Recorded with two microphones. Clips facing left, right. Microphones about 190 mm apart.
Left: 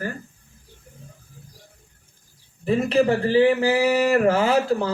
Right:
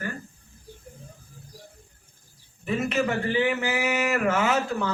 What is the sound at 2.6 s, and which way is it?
Speech, 35° left (ahead or behind).